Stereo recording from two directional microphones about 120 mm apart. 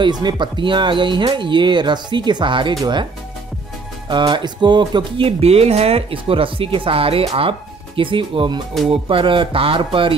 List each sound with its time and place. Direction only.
0.0 s speech: 35° right (ahead or behind)
4.1 s speech: 40° right (ahead or behind)